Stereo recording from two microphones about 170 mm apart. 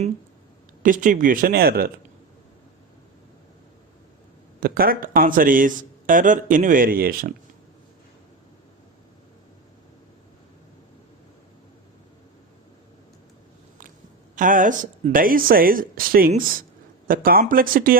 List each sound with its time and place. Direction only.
0.8 s speech: 50° right (ahead or behind)
4.6 s speech: 60° right (ahead or behind)
14.3 s speech: 50° right (ahead or behind)